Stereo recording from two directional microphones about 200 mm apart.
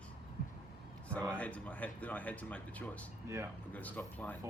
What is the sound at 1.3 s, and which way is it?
Speech, 5° left (ahead or behind).